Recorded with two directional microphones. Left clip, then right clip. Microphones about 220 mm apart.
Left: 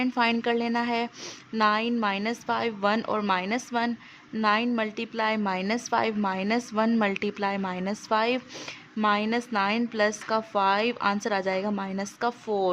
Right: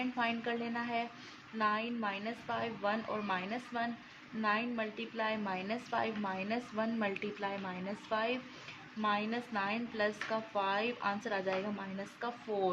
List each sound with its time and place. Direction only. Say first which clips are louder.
0.0 s a woman's voice: left 10 dB; 50° left (ahead or behind)